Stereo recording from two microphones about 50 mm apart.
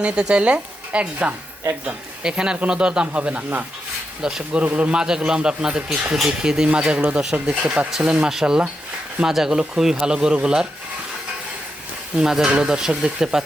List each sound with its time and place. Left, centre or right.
0.0 s a man's voice: centre
4.6 s a man's voice: right
7.9 s a man's voice: centre
12.1 s a man's voice: centre